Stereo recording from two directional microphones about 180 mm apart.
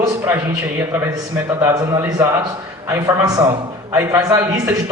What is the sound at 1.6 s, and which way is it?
A man's voice, 20° right (ahead or behind).